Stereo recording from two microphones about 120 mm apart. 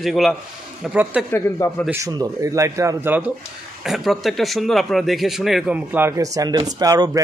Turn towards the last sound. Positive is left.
turn(degrees=-30)  # may be behind; listen again after turning